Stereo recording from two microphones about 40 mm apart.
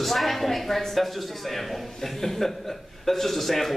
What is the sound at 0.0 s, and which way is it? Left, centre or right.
A man's voice, centre.